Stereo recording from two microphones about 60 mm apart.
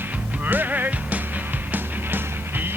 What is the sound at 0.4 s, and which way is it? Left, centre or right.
Music, right.